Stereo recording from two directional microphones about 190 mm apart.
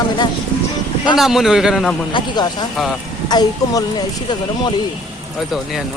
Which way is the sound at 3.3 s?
20° left (ahead or behind).